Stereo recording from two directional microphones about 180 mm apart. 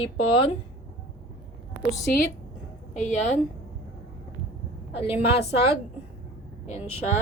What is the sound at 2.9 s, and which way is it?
Speech, 40° left (ahead or behind).